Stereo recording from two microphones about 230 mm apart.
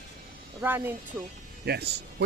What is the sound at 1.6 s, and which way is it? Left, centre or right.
Speech, right.